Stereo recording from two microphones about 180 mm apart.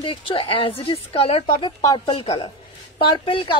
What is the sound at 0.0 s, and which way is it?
Speech, 30° left (ahead or behind).